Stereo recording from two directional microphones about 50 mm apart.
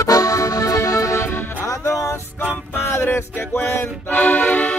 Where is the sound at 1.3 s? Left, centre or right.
Left.